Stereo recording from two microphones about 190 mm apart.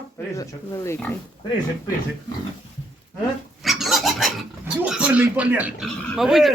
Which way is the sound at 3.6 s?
Centre (ahead or behind).